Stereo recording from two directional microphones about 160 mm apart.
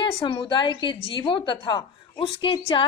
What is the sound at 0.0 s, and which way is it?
A woman's voice, 30° left (ahead or behind).